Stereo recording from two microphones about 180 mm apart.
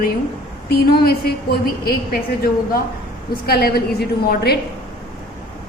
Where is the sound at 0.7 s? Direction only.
60° left (ahead or behind).